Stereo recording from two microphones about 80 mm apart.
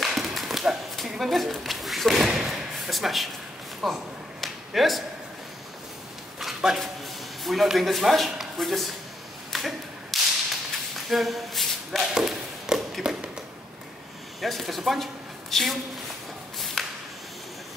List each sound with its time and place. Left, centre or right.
0.0 s horse: centre
3.8 s speech: centre
6.4 s a sound: centre
7.4 s speech: centre
9.5 s a sound: centre
10.1 s whip: centre
11.1 s shuffle: centre
14.4 s speech: centre
16.5 s a sound: centre